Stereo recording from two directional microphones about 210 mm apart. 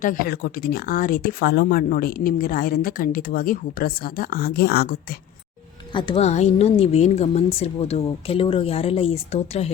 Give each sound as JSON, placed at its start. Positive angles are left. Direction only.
{"t": 0.0, "sound": "speech", "side_deg": 45}
{"t": 5.9, "sound": "a woman's voice", "side_deg": 25}